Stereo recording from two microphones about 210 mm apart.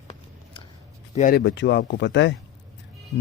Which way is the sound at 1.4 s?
55° left (ahead or behind).